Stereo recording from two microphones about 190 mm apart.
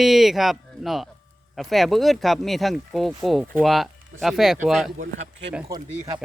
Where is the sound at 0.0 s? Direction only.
Centre (ahead or behind).